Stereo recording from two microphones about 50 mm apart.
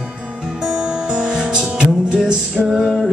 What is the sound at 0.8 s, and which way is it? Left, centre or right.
Music, centre.